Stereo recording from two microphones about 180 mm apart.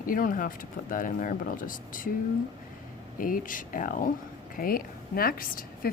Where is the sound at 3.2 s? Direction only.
50° left (ahead or behind).